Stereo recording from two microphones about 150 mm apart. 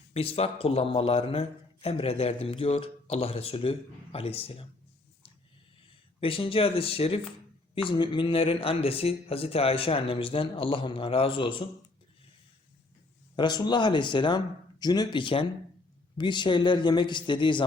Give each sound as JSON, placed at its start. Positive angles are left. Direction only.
{"t": 0.1, "sound": "a man's voice", "side_deg": 40}
{"t": 6.1, "sound": "a man's voice", "side_deg": 35}
{"t": 13.3, "sound": "a man's voice", "side_deg": 30}